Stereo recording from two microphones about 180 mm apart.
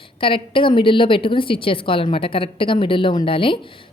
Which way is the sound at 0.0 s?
30° left (ahead or behind).